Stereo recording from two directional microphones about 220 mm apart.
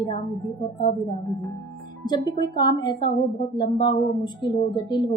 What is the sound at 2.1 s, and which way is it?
Speech, 20° left (ahead or behind).